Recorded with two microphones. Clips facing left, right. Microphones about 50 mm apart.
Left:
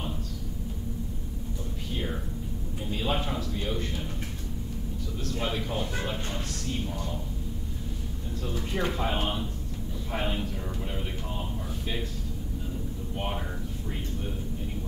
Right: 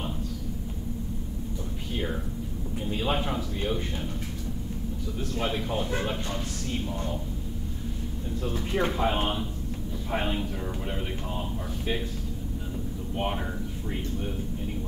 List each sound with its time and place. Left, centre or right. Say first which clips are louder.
2.9 s a man's voice: right 2 dB; centre
5.4 s a man's voice: right 2 dB; centre
8.5 s a man's voice: right 3 dB; centre
13.1 s speech: right 4 dB; centre